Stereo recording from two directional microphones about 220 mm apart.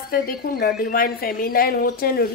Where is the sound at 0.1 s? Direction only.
45° left (ahead or behind).